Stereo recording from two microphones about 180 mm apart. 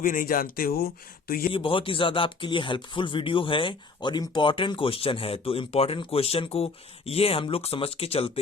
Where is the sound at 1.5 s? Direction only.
30° left (ahead or behind).